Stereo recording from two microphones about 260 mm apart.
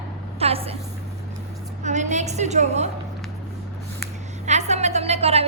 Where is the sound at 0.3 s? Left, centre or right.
Right.